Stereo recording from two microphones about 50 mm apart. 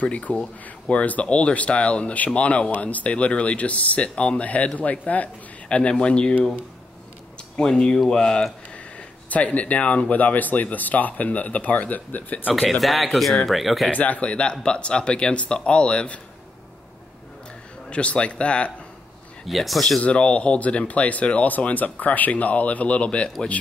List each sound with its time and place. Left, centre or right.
0.0 s speech: left
7.5 s speech: centre
9.3 s speech: left
12.8 s speech: centre
13.8 s speech: left
17.8 s speech: left
19.4 s speech: centre
20.0 s speech: left